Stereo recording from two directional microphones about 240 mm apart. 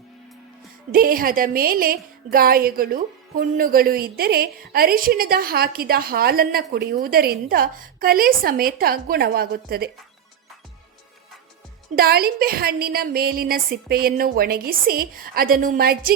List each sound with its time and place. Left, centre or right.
0.9 s a woman's voice: right
11.9 s a woman's voice: right